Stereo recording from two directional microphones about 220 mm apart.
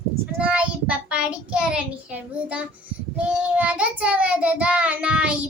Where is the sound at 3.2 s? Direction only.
5° right (ahead or behind).